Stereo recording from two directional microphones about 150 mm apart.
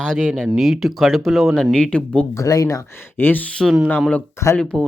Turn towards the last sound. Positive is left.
turn(degrees=5)  # may be behind; listen again after turning